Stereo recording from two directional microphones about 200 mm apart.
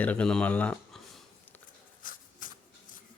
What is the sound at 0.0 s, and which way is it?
Speech, 5° left (ahead or behind).